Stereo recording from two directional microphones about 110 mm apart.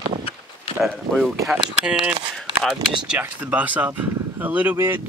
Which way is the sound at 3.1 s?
15° right (ahead or behind).